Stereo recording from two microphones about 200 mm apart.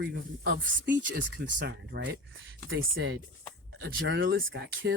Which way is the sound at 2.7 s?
75° right (ahead or behind).